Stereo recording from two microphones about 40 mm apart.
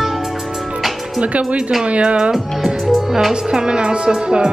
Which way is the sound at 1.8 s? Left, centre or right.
Right.